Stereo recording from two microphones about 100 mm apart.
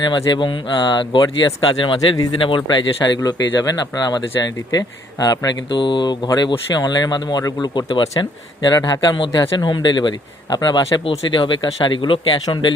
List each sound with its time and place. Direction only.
0.1 s speech: 50° left (ahead or behind)
5.8 s speech: 50° left (ahead or behind)
11.0 s speech: 60° left (ahead or behind)